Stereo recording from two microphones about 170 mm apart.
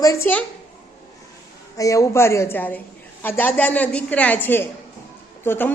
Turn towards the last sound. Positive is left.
turn(degrees=10)  # may be behind; listen again after turning